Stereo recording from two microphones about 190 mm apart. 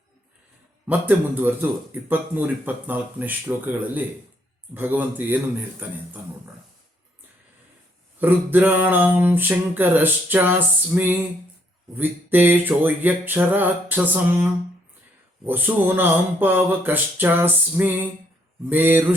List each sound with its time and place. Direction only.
0.9 s speech: 10° right (ahead or behind)
8.2 s speech: 10° right (ahead or behind)
15.4 s speech: 10° right (ahead or behind)